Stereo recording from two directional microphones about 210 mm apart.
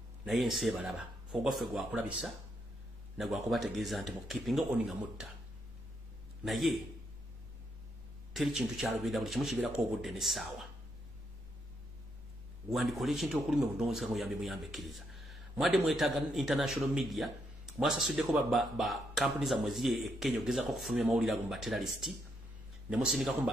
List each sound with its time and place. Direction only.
0.2 s speech: centre (ahead or behind)
6.4 s speech: centre (ahead or behind)
8.3 s speech: centre (ahead or behind)
12.7 s speech: centre (ahead or behind)